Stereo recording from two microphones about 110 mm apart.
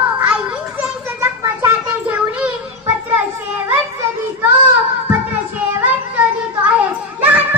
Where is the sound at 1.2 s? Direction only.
20° right (ahead or behind).